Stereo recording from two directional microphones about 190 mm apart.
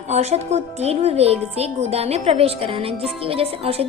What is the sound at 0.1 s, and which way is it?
Speech, 35° right (ahead or behind).